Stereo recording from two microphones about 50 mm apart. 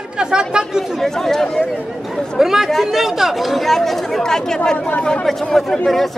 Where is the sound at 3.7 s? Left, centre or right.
Centre.